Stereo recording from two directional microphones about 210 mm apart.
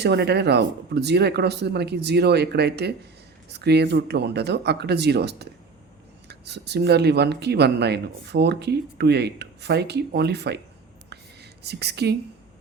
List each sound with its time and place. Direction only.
0.0 s speech: 55° right (ahead or behind)
11.6 s speech: 50° right (ahead or behind)